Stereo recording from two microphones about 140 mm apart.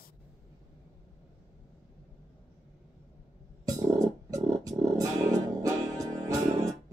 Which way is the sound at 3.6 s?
25° right (ahead or behind).